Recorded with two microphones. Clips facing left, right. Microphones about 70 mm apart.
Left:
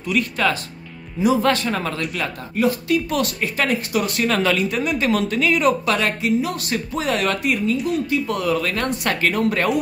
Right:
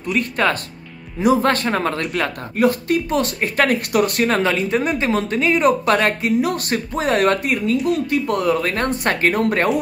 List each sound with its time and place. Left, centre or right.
0.1 s speech: right
1.2 s a woman's voice: right
3.1 s a woman's voice: right
4.3 s speech: right
5.7 s a woman's voice: right